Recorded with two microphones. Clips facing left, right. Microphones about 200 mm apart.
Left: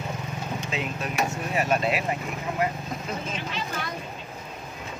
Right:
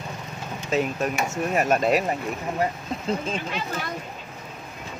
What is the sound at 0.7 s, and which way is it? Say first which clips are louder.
Speech: right 7 dB; 45° right (ahead or behind).